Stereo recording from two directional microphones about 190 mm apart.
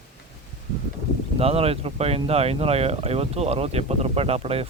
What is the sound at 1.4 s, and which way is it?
A man's voice, 30° right (ahead or behind).